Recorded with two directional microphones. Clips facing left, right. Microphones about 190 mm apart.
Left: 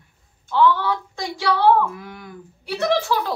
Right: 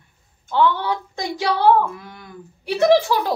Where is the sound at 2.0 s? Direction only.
10° left (ahead or behind).